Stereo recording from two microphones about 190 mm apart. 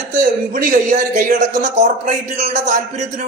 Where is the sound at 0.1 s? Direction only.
45° right (ahead or behind).